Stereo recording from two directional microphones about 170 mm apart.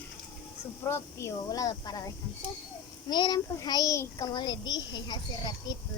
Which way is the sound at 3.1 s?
25° left (ahead or behind).